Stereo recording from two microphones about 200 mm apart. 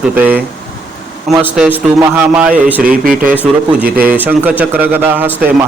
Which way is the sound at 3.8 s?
45° right (ahead or behind).